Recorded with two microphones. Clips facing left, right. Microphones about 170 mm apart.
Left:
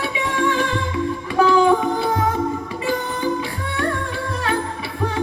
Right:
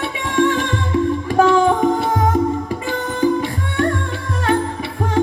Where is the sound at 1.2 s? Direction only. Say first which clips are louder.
Even; 45° right (ahead or behind).